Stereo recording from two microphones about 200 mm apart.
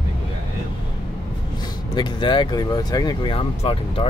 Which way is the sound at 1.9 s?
25° left (ahead or behind).